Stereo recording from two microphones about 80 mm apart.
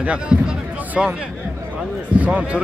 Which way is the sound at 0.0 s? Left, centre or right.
Centre.